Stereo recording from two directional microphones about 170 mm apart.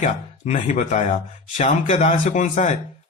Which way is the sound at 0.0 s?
45° left (ahead or behind).